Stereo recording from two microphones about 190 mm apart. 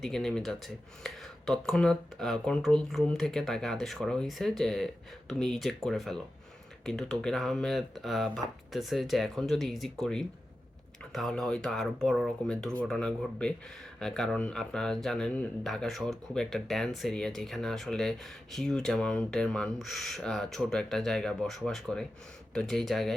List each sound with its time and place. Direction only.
0.0 s speech: 5° left (ahead or behind)